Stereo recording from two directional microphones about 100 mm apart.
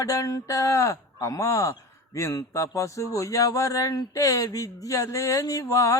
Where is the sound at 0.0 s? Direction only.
35° left (ahead or behind).